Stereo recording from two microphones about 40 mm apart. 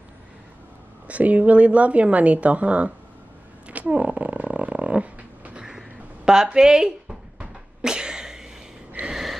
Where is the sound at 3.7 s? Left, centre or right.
Right.